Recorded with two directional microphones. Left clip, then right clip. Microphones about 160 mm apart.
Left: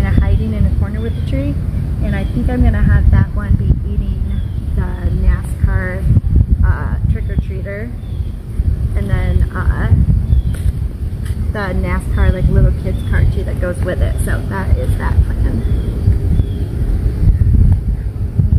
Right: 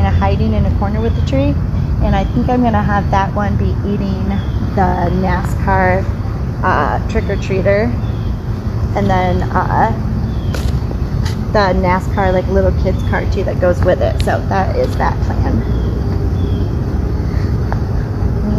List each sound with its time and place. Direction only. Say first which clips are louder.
2.0 s speech: right 7 dB; 25° left (ahead or behind)
5.7 s speech: right 11 dB; 30° left (ahead or behind)
8.9 s speech: right 12 dB; 30° left (ahead or behind)
9.5 s speech: right 13 dB; 40° left (ahead or behind)
11.5 s speech: right 9 dB; 30° left (ahead or behind)